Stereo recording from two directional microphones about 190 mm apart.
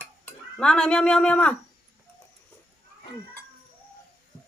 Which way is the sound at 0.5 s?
5° left (ahead or behind).